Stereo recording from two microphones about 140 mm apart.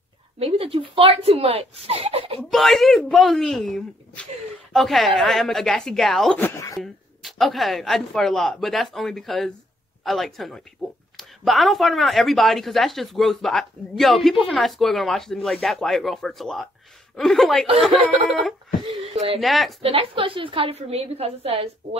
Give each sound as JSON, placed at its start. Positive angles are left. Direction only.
{"t": 0.4, "sound": "speech", "side_deg": -45}
{"t": 2.5, "sound": "a woman's voice", "side_deg": 0}
{"t": 6.4, "sound": "a sound", "side_deg": 20}
{"t": 6.8, "sound": "a woman's voice", "side_deg": 0}
{"t": 19.1, "sound": "speech", "side_deg": -45}
{"t": 19.4, "sound": "a woman's voice", "side_deg": 0}
{"t": 19.8, "sound": "speech", "side_deg": -40}